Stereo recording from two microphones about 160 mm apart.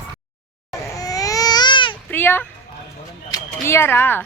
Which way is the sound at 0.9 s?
20° left (ahead or behind).